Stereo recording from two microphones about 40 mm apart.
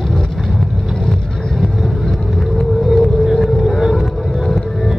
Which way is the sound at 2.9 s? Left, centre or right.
Centre.